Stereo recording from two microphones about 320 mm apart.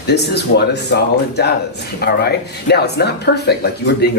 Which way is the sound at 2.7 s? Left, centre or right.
Left.